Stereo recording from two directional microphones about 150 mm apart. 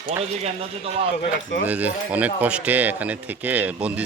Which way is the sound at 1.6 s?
10° right (ahead or behind).